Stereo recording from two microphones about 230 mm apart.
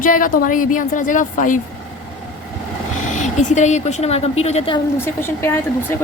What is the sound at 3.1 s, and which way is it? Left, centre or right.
Speech, left.